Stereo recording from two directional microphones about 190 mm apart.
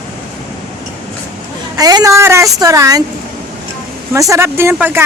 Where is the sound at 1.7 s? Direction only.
20° right (ahead or behind).